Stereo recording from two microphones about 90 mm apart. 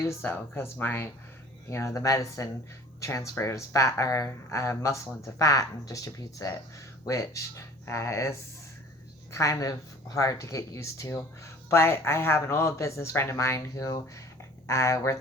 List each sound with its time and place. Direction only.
0.0 s speech: 30° left (ahead or behind)
9.3 s speech: 35° left (ahead or behind)